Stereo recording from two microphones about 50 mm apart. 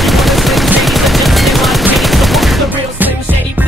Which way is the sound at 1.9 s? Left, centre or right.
Centre.